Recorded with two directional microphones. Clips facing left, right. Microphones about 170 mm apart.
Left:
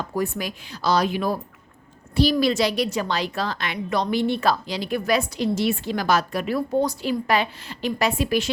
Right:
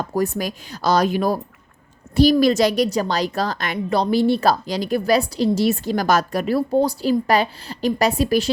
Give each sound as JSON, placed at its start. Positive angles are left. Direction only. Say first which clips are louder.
{"t": 0.0, "sound": "a woman's voice", "louder": "right 4 dB", "side_deg": -40}